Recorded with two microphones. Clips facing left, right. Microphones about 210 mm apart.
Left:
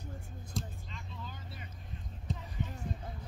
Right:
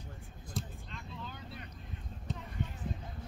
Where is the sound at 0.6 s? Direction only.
Centre (ahead or behind).